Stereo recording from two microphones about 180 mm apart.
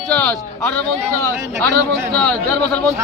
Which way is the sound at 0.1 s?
5° left (ahead or behind).